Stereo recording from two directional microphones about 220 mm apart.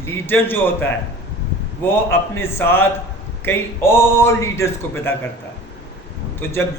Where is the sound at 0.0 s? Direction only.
10° left (ahead or behind).